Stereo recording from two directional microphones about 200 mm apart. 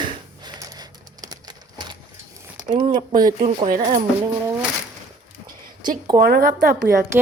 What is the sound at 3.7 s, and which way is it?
Speech, 40° right (ahead or behind).